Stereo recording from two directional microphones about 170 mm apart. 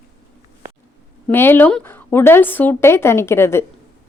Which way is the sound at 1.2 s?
15° left (ahead or behind).